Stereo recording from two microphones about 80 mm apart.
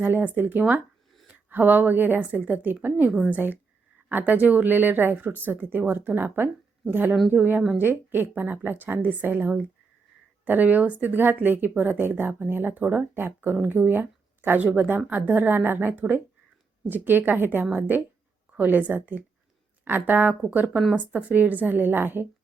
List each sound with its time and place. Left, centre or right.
0.0 s a woman's voice: right